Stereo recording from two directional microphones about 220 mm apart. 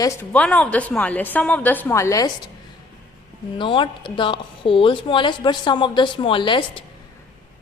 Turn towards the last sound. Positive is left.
turn(degrees=20)  # may be behind; listen again after turning